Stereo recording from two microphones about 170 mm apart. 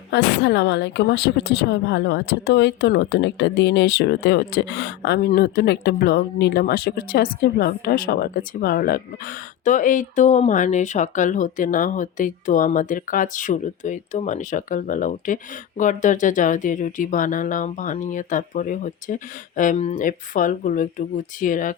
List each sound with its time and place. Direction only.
0.1 s speech: 90° left; by 21.8 s 50° left (ahead or behind)